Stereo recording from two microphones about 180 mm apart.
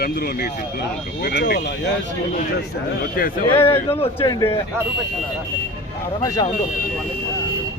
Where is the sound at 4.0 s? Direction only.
30° left (ahead or behind).